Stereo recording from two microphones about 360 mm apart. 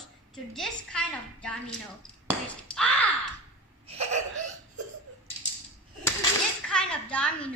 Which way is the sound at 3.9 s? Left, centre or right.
Centre.